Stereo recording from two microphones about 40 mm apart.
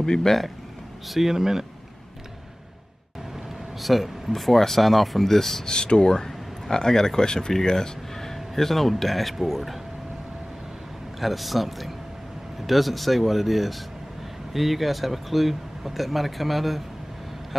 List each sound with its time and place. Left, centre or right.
0.0 s speech: centre
1.0 s speech: centre
3.8 s speech: centre
5.7 s speech: centre
11.1 s speech: centre